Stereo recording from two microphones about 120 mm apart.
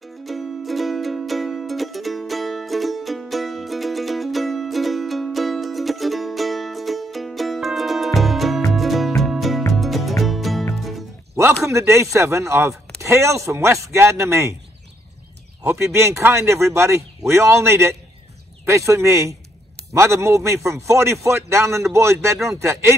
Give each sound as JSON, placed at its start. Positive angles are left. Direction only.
{"t": 0.0, "sound": "music", "side_deg": 0}
{"t": 11.6, "sound": "speech", "side_deg": -25}
{"t": 15.6, "sound": "speech", "side_deg": -20}